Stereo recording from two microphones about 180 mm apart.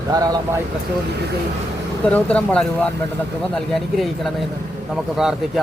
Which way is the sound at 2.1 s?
5° left (ahead or behind).